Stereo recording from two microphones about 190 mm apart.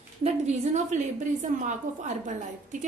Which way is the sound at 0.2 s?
35° right (ahead or behind).